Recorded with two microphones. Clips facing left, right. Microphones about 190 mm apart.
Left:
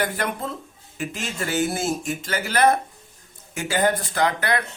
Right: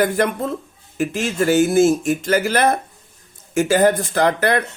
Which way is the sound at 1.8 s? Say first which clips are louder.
Right 11 dB; 50° right (ahead or behind).